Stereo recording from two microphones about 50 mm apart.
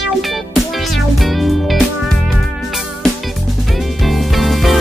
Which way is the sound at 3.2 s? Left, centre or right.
Centre.